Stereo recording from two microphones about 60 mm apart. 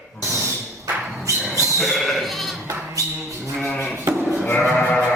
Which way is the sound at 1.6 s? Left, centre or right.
Centre.